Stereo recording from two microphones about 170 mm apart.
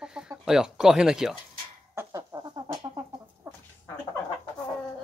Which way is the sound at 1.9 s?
15° right (ahead or behind).